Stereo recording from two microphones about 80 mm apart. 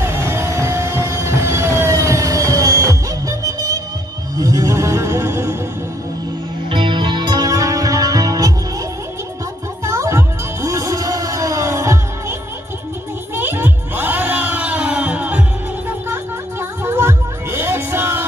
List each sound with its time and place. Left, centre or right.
0.0 s music: right
6.7 s music: right
9.8 s music: right
13.4 s music: right
16.8 s music: right